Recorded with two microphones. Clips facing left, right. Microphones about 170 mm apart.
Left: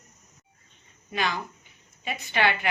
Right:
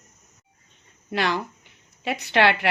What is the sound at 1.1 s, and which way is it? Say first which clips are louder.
A woman's voice: right 4 dB; 70° right (ahead or behind).